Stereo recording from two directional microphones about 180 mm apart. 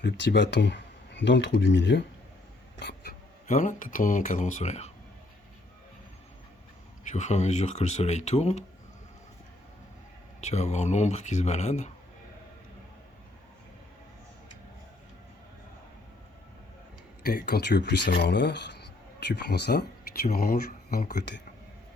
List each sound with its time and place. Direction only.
0.0 s speech: 75° left (ahead or behind)
1.5 s speech: 70° left (ahead or behind)
3.5 s speech: 45° left (ahead or behind)
7.0 s speech: 40° left (ahead or behind)
10.4 s speech: 40° left (ahead or behind)
17.2 s speech: 60° left (ahead or behind)
20.2 s speech: 55° left (ahead or behind)